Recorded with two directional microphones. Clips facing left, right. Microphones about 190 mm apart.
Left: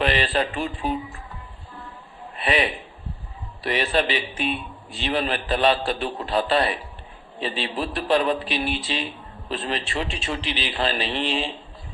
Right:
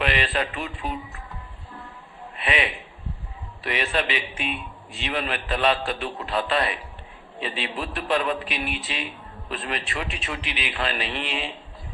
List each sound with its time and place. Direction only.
0.0 s music: 35° left (ahead or behind)
2.3 s a sound: 35° left (ahead or behind)
3.6 s a man's voice: 35° left (ahead or behind)